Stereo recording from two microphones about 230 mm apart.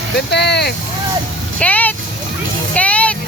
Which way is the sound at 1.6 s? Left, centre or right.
Centre.